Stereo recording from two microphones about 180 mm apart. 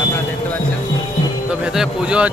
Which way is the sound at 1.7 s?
5° right (ahead or behind).